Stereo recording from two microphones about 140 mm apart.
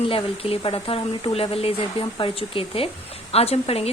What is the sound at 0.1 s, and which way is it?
Speech, 40° left (ahead or behind).